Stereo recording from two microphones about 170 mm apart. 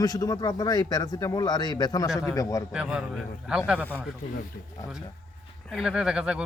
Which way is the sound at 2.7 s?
5° right (ahead or behind).